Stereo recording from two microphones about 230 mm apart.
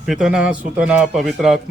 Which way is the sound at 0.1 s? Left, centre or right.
Centre.